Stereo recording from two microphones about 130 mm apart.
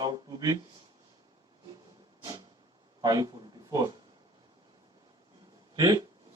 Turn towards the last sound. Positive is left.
turn(degrees=-30)  # may be behind; listen again after turning